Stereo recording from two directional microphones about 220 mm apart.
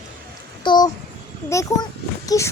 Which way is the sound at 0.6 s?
20° left (ahead or behind).